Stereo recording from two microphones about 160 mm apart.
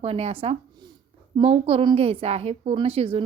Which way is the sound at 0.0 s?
40° right (ahead or behind).